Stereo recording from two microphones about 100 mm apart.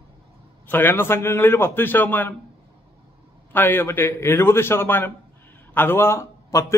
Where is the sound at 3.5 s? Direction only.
20° left (ahead or behind).